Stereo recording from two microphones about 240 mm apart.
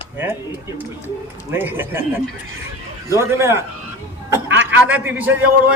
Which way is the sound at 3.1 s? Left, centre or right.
Centre.